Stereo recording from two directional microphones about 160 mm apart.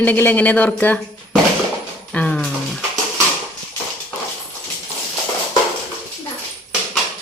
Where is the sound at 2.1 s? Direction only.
10° left (ahead or behind).